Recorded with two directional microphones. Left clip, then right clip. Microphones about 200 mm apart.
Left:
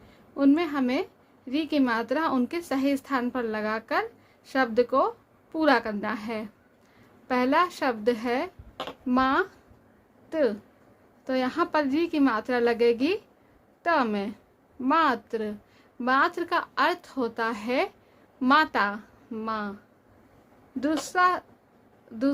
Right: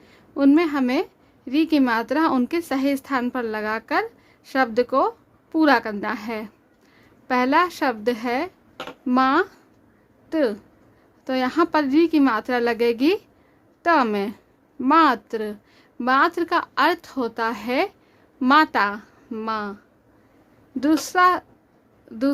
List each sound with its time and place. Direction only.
0.1 s a woman's voice: 25° right (ahead or behind)
20.7 s a woman's voice: 25° right (ahead or behind)